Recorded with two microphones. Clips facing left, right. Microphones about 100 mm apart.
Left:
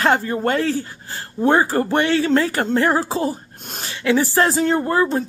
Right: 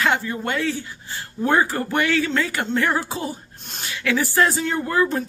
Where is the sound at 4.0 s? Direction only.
25° left (ahead or behind).